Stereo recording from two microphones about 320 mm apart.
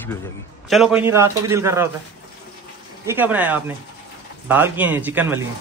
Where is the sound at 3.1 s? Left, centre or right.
Centre.